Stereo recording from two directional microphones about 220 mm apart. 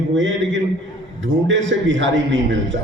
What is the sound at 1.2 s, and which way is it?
A man's voice, 60° right (ahead or behind).